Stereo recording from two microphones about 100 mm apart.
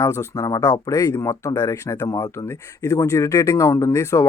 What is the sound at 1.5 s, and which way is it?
Speech, 40° left (ahead or behind).